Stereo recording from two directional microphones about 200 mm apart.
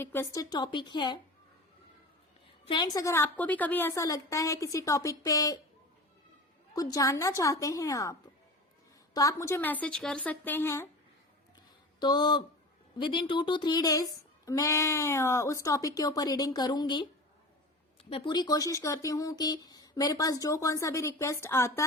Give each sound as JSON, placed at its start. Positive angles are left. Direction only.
{"t": 0.0, "sound": "speech", "side_deg": 10}
{"t": 2.6, "sound": "speech", "side_deg": 20}
{"t": 6.7, "sound": "speech", "side_deg": 15}
{"t": 9.1, "sound": "speech", "side_deg": 15}
{"t": 11.9, "sound": "speech", "side_deg": 20}
{"t": 18.1, "sound": "speech", "side_deg": 20}